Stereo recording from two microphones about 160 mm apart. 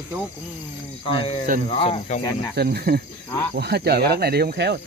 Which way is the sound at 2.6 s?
80° right.